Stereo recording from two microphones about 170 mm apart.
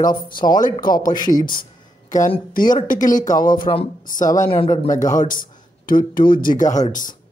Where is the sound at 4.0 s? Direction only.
50° left (ahead or behind).